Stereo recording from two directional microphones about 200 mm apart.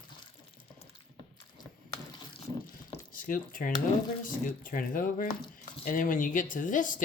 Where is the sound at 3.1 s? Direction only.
45° left (ahead or behind).